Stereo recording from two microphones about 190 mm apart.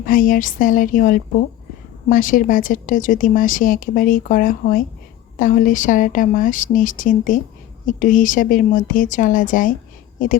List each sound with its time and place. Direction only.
0.0 s a woman's voice: 45° left (ahead or behind)